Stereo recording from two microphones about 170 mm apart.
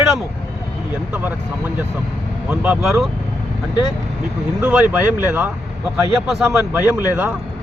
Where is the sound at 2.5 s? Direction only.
5° right (ahead or behind).